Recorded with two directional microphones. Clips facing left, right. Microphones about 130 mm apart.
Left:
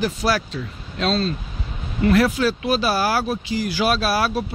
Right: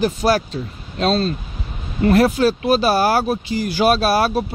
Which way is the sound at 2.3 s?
45° right (ahead or behind).